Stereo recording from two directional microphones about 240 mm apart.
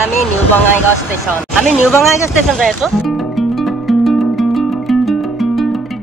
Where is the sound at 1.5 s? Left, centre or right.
Centre.